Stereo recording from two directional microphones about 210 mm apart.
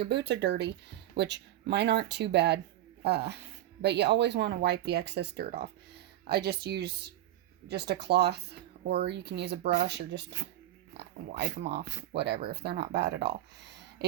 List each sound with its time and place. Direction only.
0.0 s speech: 55° right (ahead or behind)